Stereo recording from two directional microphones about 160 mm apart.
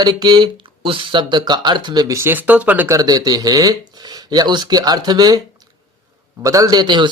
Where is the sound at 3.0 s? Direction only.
25° right (ahead or behind).